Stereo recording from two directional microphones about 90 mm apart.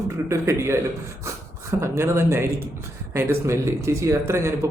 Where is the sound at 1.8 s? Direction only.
30° right (ahead or behind).